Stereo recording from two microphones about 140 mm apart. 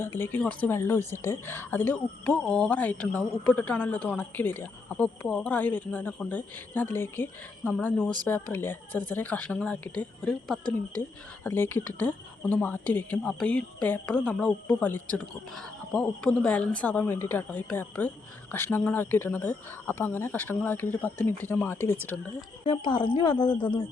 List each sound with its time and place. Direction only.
0.0 s a woman's voice: 15° left (ahead or behind)
22.6 s speech: 35° left (ahead or behind)